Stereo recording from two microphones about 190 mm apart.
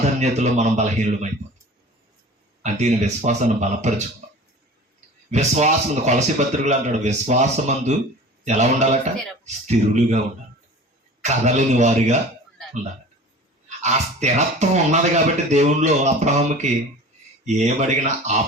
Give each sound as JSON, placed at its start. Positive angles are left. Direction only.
{"t": 0.2, "sound": "speech", "side_deg": -40}
{"t": 2.6, "sound": "speech", "side_deg": -35}
{"t": 4.2, "sound": "a sound", "side_deg": -40}
{"t": 5.3, "sound": "speech", "side_deg": -40}
{"t": 11.2, "sound": "speech", "side_deg": -40}
{"t": 13.7, "sound": "speech", "side_deg": -35}